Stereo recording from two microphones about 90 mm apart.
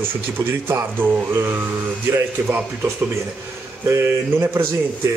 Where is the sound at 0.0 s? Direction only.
25° right (ahead or behind).